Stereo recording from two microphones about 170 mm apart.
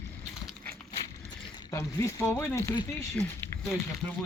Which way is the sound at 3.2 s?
Centre (ahead or behind).